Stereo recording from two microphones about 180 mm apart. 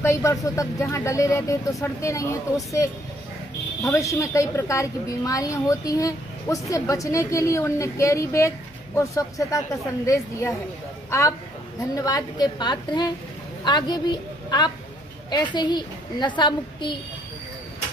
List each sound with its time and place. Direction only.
0.0 s a woman's voice: 15° left (ahead or behind)